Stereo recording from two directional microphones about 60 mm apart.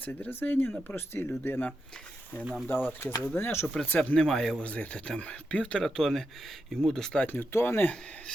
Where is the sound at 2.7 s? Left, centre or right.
Left.